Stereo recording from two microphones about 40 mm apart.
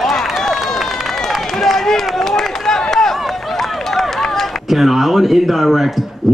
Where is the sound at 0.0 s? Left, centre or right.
Centre.